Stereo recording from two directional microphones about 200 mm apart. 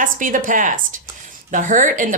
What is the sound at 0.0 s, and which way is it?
Speech, 40° right (ahead or behind).